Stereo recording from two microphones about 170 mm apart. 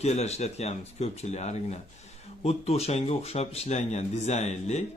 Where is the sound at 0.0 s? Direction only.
40° left (ahead or behind).